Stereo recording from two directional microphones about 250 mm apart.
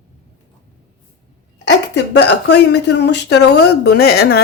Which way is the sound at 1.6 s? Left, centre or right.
Left.